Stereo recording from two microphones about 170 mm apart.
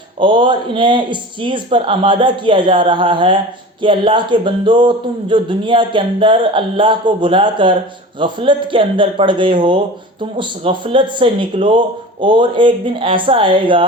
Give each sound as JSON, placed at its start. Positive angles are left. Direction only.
{"t": 0.2, "sound": "speech", "side_deg": -30}